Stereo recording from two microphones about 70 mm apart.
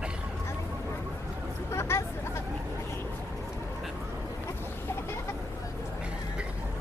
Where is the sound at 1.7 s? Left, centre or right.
Left.